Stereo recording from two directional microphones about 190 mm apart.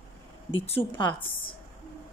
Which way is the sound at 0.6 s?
30° left (ahead or behind).